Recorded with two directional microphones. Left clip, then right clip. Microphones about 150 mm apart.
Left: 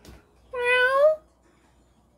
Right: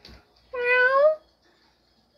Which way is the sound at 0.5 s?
20° left (ahead or behind).